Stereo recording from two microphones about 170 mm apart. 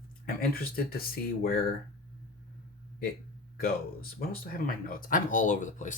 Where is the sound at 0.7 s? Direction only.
60° left (ahead or behind).